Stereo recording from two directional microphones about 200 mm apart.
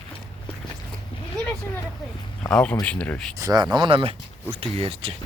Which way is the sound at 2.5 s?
5° left (ahead or behind).